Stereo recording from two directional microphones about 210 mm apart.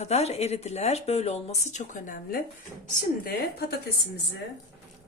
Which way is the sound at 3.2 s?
50° left (ahead or behind).